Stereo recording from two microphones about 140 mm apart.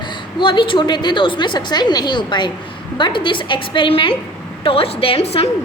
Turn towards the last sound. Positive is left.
turn(degrees=45)  # may be behind; listen again after turning